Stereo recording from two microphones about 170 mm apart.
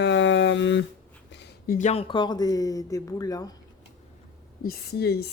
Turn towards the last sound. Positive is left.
turn(degrees=70)  # may be behind; listen again after turning